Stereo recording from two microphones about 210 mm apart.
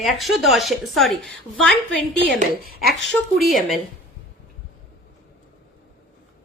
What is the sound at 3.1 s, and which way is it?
Speech, centre (ahead or behind).